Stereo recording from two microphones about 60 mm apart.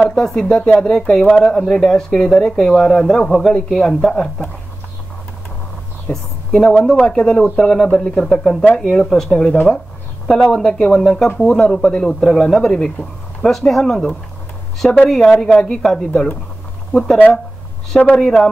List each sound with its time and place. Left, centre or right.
0.1 s speech: centre
6.1 s a woman's voice: centre
18.1 s speech: centre